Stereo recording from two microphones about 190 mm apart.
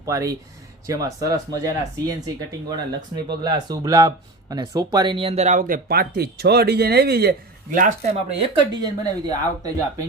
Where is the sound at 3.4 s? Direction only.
20° right (ahead or behind); by 7.3 s 55° right (ahead or behind).